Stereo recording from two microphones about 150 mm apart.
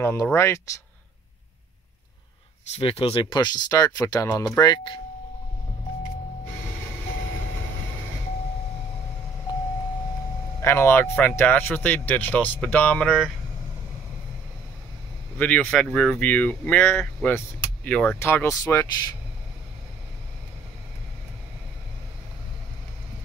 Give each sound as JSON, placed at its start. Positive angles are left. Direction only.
{"t": 0.0, "sound": "speech", "side_deg": 15}
{"t": 2.8, "sound": "speech", "side_deg": 40}
{"t": 10.6, "sound": "speech", "side_deg": 15}
{"t": 15.3, "sound": "speech", "side_deg": 10}